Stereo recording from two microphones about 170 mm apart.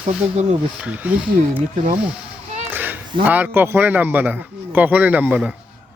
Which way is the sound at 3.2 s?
10° right (ahead or behind).